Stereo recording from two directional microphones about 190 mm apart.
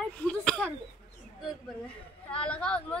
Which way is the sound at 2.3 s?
5° left (ahead or behind).